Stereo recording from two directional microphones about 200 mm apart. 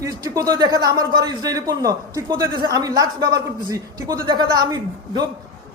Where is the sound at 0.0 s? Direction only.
20° right (ahead or behind).